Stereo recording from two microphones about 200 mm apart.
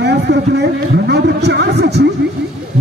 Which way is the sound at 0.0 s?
55° right (ahead or behind).